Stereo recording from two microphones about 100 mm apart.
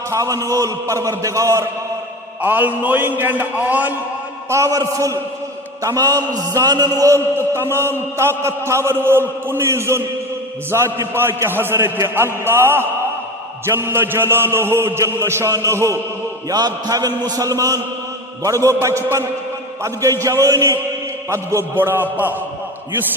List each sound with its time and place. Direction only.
0.1 s a man's voice: 35° right (ahead or behind)
2.4 s a man's voice: 15° right (ahead or behind)
4.4 s a man's voice: 30° right (ahead or behind)
16.5 s a man's voice: 45° right (ahead or behind); by 22.4 s 20° right (ahead or behind)